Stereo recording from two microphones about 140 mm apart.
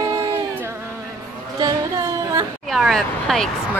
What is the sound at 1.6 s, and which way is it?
Singing, 30° right (ahead or behind).